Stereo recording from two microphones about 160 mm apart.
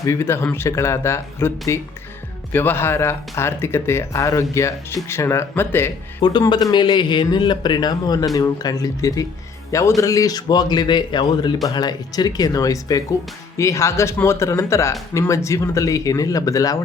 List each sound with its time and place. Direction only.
0.0 s speech: 15° left (ahead or behind)
6.2 s a man's voice: 30° left (ahead or behind)